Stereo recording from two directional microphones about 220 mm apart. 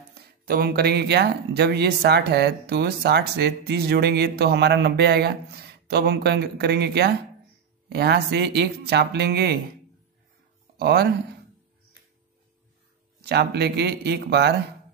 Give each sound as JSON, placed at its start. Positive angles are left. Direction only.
{"t": 0.5, "sound": "speech", "side_deg": -45}
{"t": 10.8, "sound": "speech", "side_deg": -45}
{"t": 13.2, "sound": "speech", "side_deg": -45}